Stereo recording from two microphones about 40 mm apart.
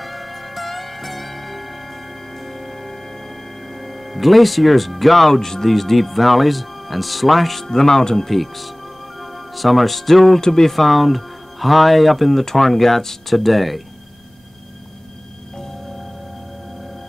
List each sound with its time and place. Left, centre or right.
0.0 s music: centre
3.8 s speech: centre